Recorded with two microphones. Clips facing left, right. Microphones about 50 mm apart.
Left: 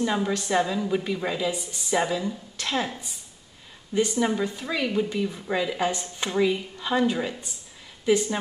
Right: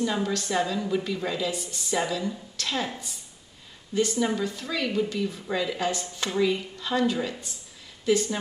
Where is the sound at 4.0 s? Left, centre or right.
Centre.